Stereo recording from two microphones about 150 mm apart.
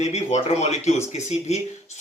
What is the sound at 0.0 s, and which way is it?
Speech, 50° left (ahead or behind).